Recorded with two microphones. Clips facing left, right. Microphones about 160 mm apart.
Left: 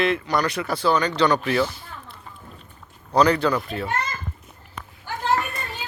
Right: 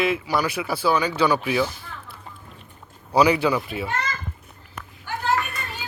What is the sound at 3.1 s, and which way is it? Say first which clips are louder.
Speech: even; 10° right (ahead or behind).